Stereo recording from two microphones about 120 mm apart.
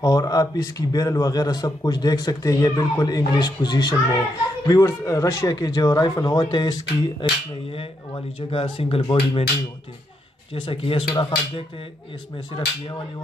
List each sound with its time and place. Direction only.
0.0 s a man's voice: 30° left (ahead or behind); by 9.4 s 45° left (ahead or behind)
10.5 s speech: 50° left (ahead or behind)